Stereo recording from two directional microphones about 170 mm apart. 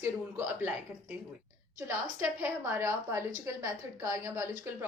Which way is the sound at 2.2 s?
15° right (ahead or behind).